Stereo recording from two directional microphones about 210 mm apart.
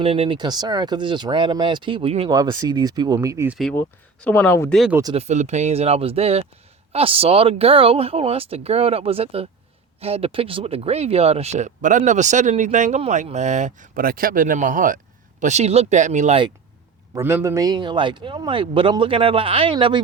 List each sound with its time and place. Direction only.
0.0 s speech: 25° right (ahead or behind); by 3.6 s 10° right (ahead or behind)
3.6 s speech: 5° left (ahead or behind)
4.7 s speech: centre (ahead or behind)
5.1 s speech: 35° right (ahead or behind)
17.2 s speech: 10° right (ahead or behind)